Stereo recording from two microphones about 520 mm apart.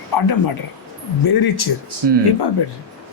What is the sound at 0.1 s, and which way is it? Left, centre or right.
Speech, left.